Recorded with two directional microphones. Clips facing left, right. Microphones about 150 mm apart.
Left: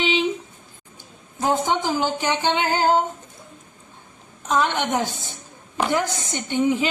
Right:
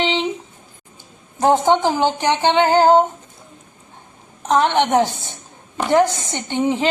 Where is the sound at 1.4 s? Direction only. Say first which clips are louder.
Right 7 dB; 65° right (ahead or behind).